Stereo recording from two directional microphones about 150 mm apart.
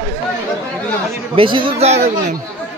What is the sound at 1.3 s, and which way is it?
Speech, 35° right (ahead or behind).